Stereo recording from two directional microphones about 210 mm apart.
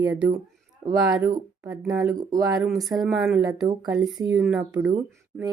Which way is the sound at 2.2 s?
20° right (ahead or behind).